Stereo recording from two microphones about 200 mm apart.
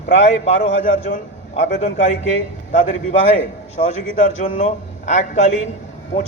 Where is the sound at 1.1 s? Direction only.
40° left (ahead or behind).